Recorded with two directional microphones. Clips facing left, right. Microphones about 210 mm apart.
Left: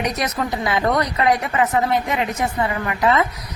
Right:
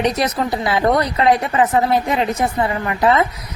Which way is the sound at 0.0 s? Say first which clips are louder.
Right 4 dB; 30° right (ahead or behind).